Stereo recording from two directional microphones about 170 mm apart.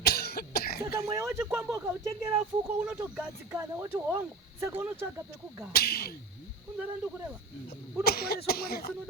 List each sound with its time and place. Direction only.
0.0 s cough: 70° left (ahead or behind)
0.9 s speech: 15° right (ahead or behind)
5.7 s speech: 65° left (ahead or behind)
8.0 s speech: 65° left (ahead or behind)